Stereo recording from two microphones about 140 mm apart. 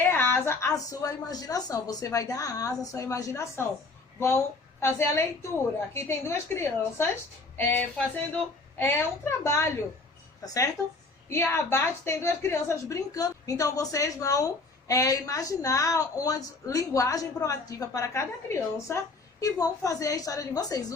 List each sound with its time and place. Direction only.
0.0 s a woman's voice: 15° left (ahead or behind)